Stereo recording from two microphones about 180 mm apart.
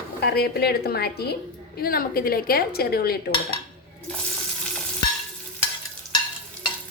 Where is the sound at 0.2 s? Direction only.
60° left (ahead or behind).